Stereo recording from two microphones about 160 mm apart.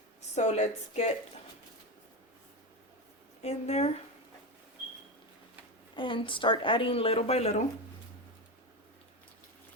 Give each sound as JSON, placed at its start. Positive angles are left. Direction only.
{"t": 0.2, "sound": "speech", "side_deg": 45}
{"t": 3.4, "sound": "speech", "side_deg": 40}
{"t": 6.0, "sound": "speech", "side_deg": 30}